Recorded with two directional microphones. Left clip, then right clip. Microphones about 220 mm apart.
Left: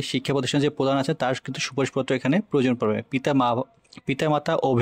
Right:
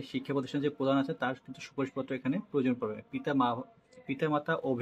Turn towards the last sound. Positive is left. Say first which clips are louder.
# left 9 dB
turn(degrees=50)  # may be behind; listen again after turning